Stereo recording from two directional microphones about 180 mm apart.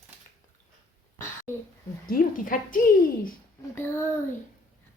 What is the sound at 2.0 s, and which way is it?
A woman's voice, 50° left (ahead or behind).